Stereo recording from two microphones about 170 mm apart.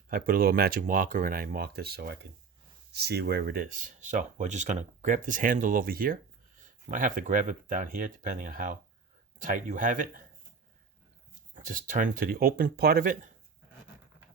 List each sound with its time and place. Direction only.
0.1 s speech: 60° right (ahead or behind)
11.5 s speech: 50° right (ahead or behind)